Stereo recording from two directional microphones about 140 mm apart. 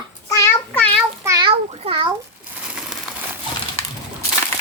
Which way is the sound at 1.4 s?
40° right (ahead or behind).